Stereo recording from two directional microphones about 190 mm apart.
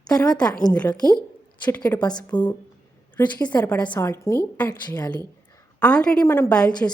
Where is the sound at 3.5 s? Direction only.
10° left (ahead or behind).